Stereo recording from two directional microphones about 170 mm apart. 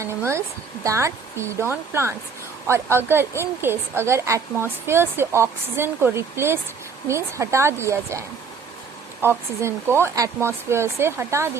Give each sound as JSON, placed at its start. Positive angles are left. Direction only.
{"t": 0.0, "sound": "a woman's voice", "side_deg": -15}
{"t": 9.2, "sound": "a woman's voice", "side_deg": -15}